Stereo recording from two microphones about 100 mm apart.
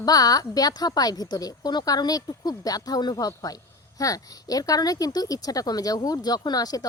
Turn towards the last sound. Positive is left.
turn(degrees=40)  # may be behind; listen again after turning